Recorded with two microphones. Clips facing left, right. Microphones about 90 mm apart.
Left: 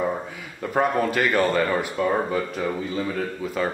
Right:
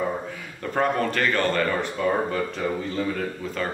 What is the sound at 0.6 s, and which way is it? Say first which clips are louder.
Speech: left 2 dB; 10° left (ahead or behind).